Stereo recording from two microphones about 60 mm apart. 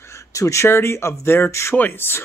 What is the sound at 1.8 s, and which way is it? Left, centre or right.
Speech, left.